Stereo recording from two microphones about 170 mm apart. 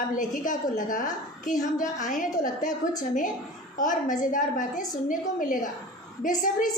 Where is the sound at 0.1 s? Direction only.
50° left (ahead or behind).